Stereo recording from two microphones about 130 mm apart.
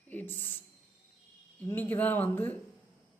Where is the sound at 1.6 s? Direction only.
15° left (ahead or behind).